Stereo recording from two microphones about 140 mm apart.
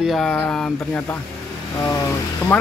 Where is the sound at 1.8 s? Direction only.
15° left (ahead or behind).